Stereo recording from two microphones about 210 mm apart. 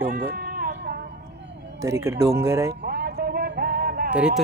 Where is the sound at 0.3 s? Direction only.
45° right (ahead or behind).